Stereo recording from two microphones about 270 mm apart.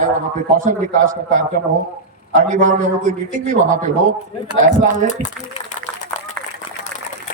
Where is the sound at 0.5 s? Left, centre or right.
Right.